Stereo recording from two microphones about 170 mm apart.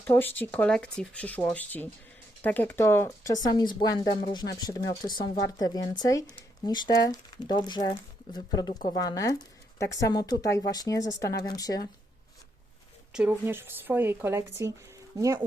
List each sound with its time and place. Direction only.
0.1 s speech: 10° left (ahead or behind)
13.1 s speech: 10° right (ahead or behind)